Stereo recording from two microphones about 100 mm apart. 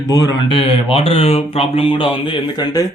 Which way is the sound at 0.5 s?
75° left (ahead or behind).